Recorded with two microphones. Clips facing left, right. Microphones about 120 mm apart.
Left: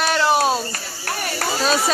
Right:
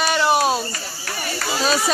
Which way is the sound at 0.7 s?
50° left (ahead or behind).